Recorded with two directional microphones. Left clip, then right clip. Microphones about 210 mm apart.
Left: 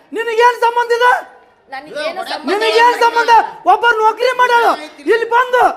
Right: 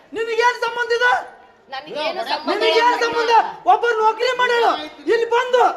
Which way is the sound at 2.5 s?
60° left (ahead or behind).